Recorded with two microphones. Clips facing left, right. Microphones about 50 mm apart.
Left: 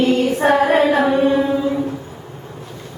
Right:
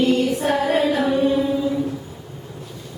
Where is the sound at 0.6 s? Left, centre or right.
Left.